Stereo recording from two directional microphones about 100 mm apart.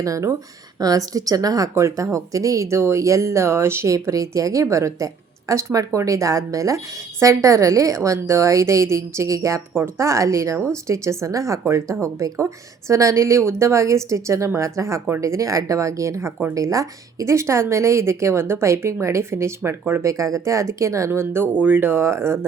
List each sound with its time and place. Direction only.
0.0 s a woman's voice: 30° right (ahead or behind)